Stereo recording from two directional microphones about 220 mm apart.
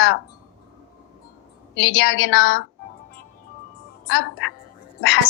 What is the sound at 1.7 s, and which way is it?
Speech, 55° left (ahead or behind).